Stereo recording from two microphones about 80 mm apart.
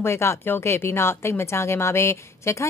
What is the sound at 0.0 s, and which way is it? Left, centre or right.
Speech, left.